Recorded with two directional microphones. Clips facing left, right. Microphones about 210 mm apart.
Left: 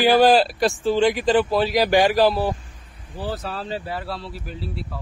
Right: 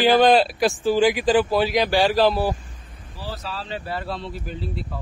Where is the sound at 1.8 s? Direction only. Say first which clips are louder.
Left 2 dB; 15° left (ahead or behind).